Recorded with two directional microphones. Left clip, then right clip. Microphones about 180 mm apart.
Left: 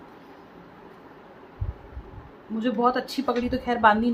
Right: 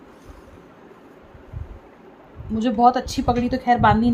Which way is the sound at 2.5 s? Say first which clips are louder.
Right 6 dB; 45° right (ahead or behind).